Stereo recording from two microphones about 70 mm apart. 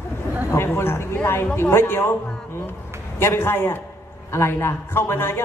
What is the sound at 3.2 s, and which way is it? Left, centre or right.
Speech, left.